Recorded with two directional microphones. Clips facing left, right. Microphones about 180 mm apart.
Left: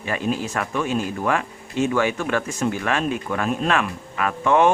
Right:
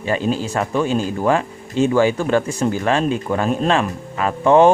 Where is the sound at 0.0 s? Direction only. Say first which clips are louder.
Right 4 dB; 30° right (ahead or behind).